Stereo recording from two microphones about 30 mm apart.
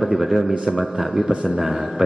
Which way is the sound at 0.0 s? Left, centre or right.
Centre.